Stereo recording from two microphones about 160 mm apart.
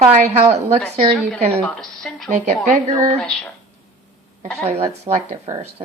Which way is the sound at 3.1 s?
5° left (ahead or behind).